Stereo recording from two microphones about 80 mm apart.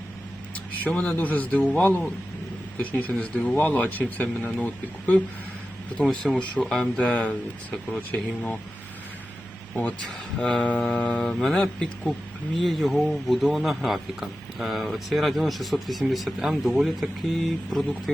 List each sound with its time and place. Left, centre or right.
0.5 s a man's voice: centre
6.0 s a man's voice: centre
8.1 s speech: centre
10.4 s a man's voice: centre